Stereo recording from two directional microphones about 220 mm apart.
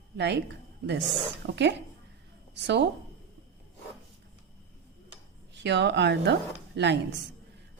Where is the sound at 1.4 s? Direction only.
55° right (ahead or behind).